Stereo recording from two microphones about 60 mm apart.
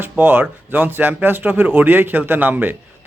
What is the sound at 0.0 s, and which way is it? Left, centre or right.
A man's voice, right.